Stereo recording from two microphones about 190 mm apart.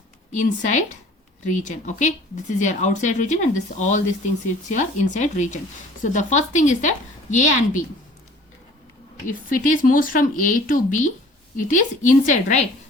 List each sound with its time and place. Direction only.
0.3 s speech: 40° left (ahead or behind)
9.2 s speech: 45° left (ahead or behind)